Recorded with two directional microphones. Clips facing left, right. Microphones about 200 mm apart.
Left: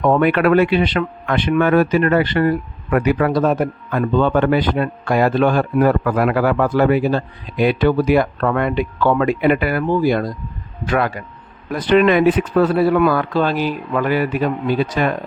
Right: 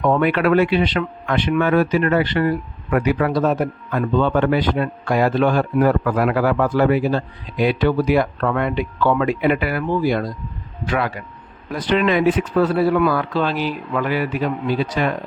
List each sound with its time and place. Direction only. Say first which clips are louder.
0.0 s a man's voice: left 2 dB; 50° left (ahead or behind)